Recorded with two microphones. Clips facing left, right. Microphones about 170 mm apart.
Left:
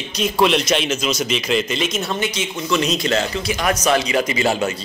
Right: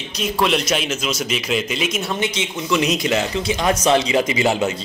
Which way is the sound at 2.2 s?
20° right (ahead or behind).